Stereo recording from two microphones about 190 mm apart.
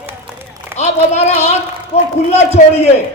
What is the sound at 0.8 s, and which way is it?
A man's voice, 35° left (ahead or behind).